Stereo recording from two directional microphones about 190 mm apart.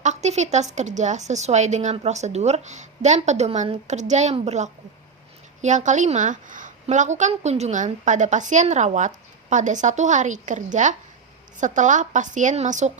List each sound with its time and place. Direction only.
0.0 s a woman's voice: 35° right (ahead or behind)